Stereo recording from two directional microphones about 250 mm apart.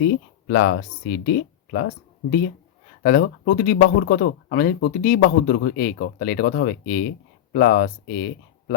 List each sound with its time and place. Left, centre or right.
0.0 s speech: left
3.0 s speech: left